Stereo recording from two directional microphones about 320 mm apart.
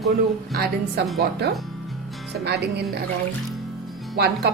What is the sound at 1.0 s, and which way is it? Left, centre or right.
Speech, right.